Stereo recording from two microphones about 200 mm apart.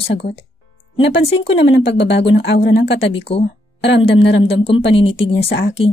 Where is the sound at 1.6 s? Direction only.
60° left (ahead or behind).